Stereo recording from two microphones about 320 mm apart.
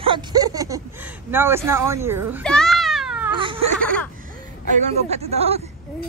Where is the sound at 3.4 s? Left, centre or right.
Centre.